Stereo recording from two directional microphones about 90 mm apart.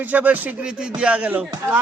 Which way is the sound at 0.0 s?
15° right (ahead or behind).